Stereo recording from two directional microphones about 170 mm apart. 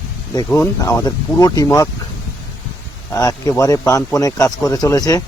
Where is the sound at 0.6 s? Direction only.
20° left (ahead or behind).